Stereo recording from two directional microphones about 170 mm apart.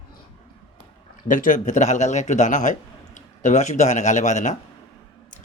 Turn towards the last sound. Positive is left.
turn(degrees=45)  # may be behind; listen again after turning